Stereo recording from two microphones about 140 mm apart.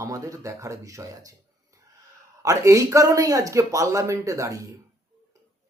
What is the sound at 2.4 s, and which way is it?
A man's voice, 20° right (ahead or behind).